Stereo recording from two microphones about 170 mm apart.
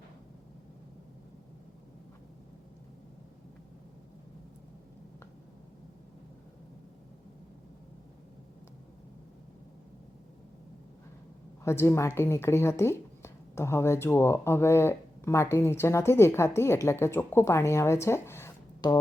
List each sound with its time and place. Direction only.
11.6 s speech: 15° left (ahead or behind)